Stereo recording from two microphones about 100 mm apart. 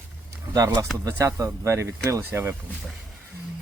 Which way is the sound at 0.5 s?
35° right (ahead or behind).